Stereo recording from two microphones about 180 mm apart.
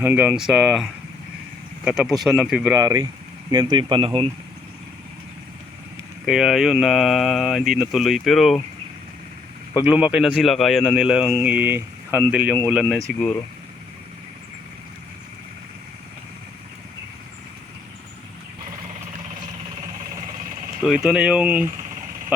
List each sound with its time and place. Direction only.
0.0 s speech: 10° right (ahead or behind)
2.8 s speech: 20° right (ahead or behind)
6.2 s speech: centre (ahead or behind)
9.8 s a man's voice: 5° right (ahead or behind)
13.1 s speech: 5° left (ahead or behind)
20.8 s speech: 5° right (ahead or behind)
22.3 s a sound: 5° right (ahead or behind)